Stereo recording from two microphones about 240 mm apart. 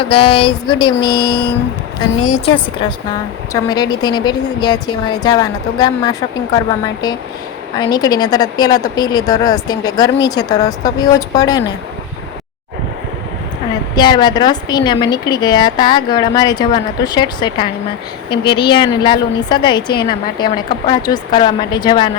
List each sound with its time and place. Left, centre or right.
0.1 s a woman's voice: left
1.3 s a sound: left
2.2 s a woman's voice: left
3.5 s a woman's voice: centre
7.8 s a woman's voice: centre
13.9 s a woman's voice: centre